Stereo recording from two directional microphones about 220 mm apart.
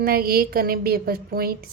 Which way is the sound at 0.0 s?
45° right (ahead or behind).